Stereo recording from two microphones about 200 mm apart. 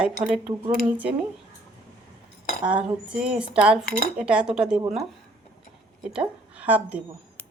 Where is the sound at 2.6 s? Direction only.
5° right (ahead or behind).